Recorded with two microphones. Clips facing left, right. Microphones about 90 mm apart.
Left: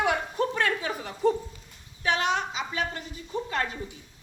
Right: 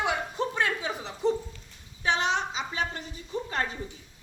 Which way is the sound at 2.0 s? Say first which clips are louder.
Left 1 dB; 25° right (ahead or behind).